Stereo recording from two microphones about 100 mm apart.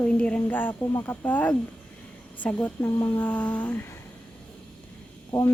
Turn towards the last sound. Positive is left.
turn(degrees=10)  # may be behind; listen again after turning